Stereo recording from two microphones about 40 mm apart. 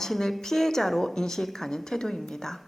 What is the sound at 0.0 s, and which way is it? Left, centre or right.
A woman's voice, centre.